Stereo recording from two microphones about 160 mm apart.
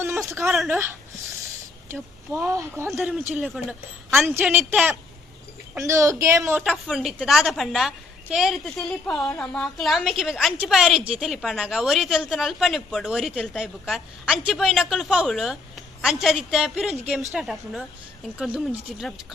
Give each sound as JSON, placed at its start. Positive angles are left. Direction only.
{"t": 0.4, "sound": "a woman's voice", "side_deg": 0}
{"t": 1.9, "sound": "speech", "side_deg": -15}
{"t": 3.3, "sound": "speech", "side_deg": -5}
{"t": 5.7, "sound": "a woman's voice", "side_deg": -20}
{"t": 6.6, "sound": "a woman's voice", "side_deg": 0}